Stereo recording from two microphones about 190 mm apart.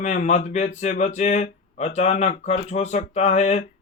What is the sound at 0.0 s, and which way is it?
Speech, 40° left (ahead or behind).